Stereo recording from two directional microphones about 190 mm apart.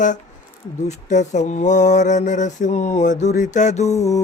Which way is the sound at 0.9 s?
40° left (ahead or behind).